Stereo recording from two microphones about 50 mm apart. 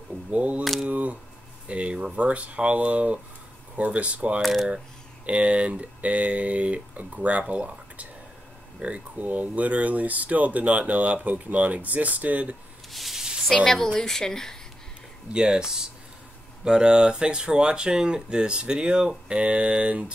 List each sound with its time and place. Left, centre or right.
0.3 s speech: right
4.4 s speech: centre
5.2 s speech: right
12.9 s a sound: centre
13.5 s speech: centre
15.3 s speech: centre